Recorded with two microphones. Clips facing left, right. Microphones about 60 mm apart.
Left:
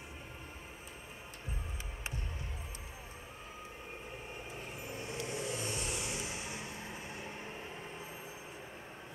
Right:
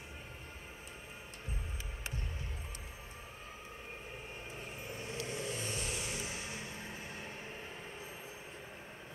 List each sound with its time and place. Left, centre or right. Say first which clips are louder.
4.9 s vehicle: left 1 dB; centre